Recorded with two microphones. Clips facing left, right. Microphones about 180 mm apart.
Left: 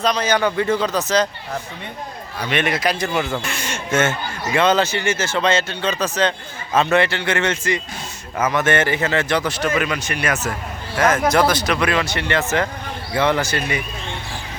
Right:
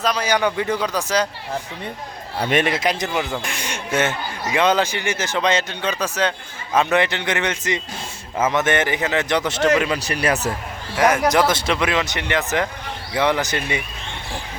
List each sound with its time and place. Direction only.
0.0 s speech: 10° right (ahead or behind)
2.5 s speech: 40° right (ahead or behind)
2.7 s a man's voice: 20° right (ahead or behind)
9.8 s speech: 30° right (ahead or behind)
10.9 s a man's voice: 15° right (ahead or behind)